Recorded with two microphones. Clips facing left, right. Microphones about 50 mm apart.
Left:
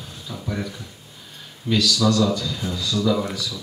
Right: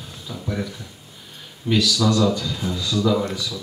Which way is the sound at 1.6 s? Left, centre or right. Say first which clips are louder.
Even; centre.